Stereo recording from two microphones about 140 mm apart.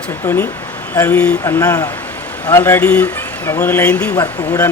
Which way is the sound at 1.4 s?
25° left (ahead or behind).